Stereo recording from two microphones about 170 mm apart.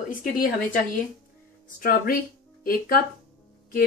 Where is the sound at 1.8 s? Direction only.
60° left (ahead or behind).